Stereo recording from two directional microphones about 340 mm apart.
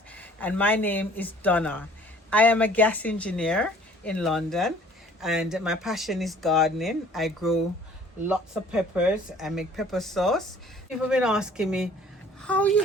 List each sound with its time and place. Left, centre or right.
0.2 s a woman's voice: centre